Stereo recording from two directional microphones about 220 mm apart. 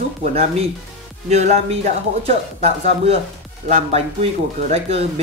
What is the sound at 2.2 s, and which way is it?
Speech, 30° right (ahead or behind).